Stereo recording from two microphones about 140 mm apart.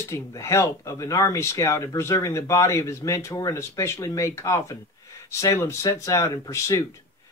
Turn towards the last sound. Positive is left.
turn(degrees=20)  # may be behind; listen again after turning